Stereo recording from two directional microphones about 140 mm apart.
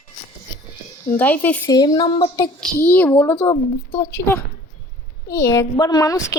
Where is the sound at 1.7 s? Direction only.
30° left (ahead or behind).